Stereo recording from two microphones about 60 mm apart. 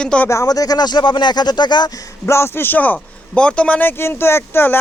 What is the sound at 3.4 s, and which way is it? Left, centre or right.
Speech, centre.